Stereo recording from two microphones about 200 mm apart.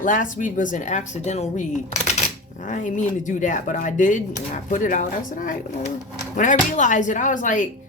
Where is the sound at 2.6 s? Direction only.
40° left (ahead or behind).